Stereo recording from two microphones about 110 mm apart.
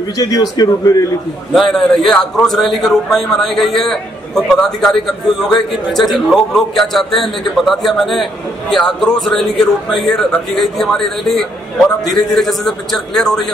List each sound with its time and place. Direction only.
0.2 s a man's voice: 35° left (ahead or behind)
1.5 s a man's voice: 5° left (ahead or behind)